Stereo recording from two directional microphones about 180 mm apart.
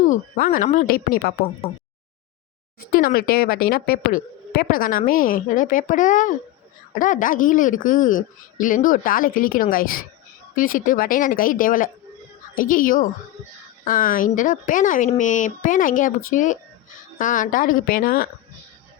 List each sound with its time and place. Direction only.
0.0 s a woman's voice: 45° left (ahead or behind)
2.8 s a woman's voice: 55° left (ahead or behind)